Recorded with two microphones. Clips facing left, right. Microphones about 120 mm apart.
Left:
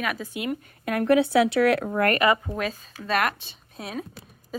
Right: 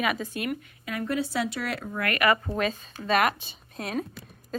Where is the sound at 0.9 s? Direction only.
60° left (ahead or behind).